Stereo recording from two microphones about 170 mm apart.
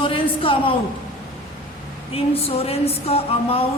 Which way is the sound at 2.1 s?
35° left (ahead or behind).